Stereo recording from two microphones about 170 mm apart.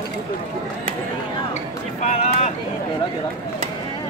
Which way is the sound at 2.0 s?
40° left (ahead or behind).